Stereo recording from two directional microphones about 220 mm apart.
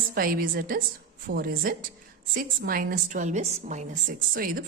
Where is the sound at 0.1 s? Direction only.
40° right (ahead or behind).